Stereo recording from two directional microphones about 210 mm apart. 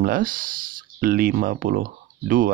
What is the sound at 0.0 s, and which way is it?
Speech, 40° right (ahead or behind).